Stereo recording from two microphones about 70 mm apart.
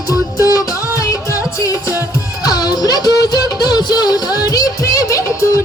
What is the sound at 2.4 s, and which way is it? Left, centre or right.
Music, left.